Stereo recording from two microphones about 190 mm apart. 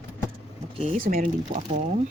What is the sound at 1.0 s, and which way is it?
Speech, 50° right (ahead or behind).